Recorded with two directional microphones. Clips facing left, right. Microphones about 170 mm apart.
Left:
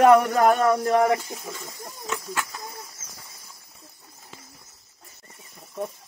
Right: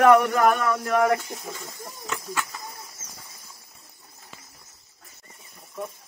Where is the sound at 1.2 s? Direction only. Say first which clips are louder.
Even; 5° left (ahead or behind).